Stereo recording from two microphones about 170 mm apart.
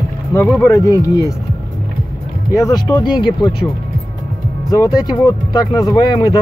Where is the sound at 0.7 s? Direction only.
20° left (ahead or behind).